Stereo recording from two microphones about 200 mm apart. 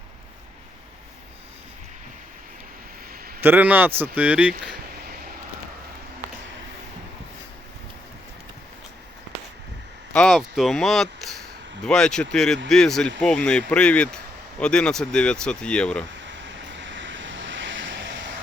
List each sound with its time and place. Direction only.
3.1 s a sound: 45° right (ahead or behind)
3.4 s speech: 10° right (ahead or behind)
10.1 s speech: centre (ahead or behind)
16.3 s vehicle: 65° right (ahead or behind)